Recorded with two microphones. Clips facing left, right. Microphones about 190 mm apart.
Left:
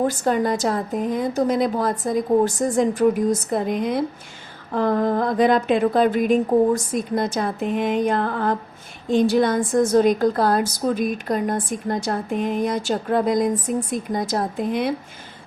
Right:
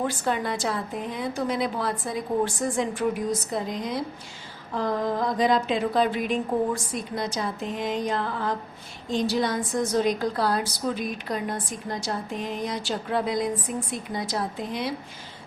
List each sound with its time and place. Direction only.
0.0 s a woman's voice: 40° left (ahead or behind)